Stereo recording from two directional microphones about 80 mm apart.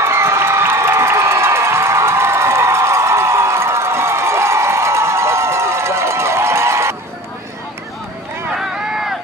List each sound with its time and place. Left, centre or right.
0.0 s crowd: right
8.5 s run: centre